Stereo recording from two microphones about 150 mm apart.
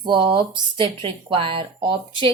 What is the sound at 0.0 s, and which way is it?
Speech, 30° right (ahead or behind).